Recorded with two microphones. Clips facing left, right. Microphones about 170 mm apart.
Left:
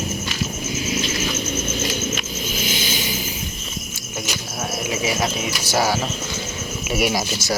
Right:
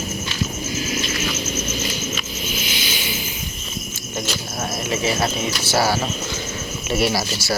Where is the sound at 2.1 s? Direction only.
45° left (ahead or behind).